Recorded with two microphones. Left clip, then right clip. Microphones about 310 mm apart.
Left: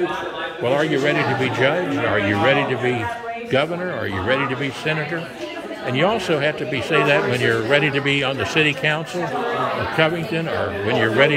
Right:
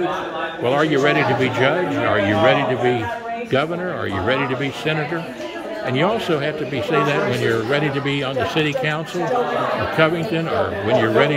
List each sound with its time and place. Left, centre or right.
0.7 s speech: centre
4.3 s speech: centre
5.9 s speech: centre
9.9 s speech: centre